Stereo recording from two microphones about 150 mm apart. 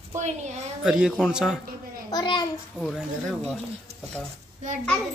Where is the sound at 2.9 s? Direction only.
Centre (ahead or behind).